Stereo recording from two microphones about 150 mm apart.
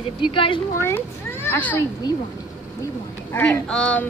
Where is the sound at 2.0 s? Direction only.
25° left (ahead or behind).